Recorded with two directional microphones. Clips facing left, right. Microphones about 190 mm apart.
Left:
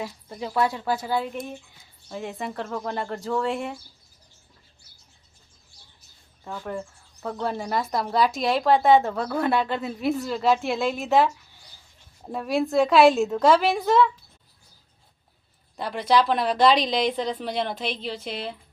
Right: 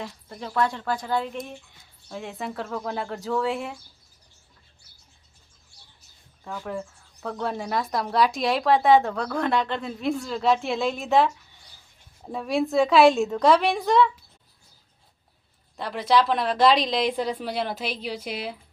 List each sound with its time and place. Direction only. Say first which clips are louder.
0.0 s speech: left 3 dB; 10° left (ahead or behind)
6.4 s speech: even; 5° left (ahead or behind)
15.8 s speech: even; centre (ahead or behind)